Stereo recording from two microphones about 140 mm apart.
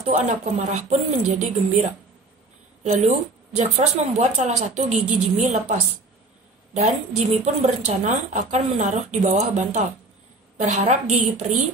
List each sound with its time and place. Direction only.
0.1 s a woman's voice: 55° right (ahead or behind)